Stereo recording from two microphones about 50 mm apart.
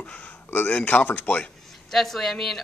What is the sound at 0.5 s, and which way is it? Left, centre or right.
Speech, left.